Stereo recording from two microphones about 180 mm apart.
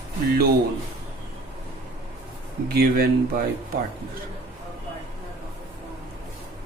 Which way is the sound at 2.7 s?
55° right (ahead or behind).